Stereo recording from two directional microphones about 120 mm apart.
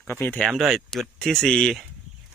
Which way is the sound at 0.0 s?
15° left (ahead or behind).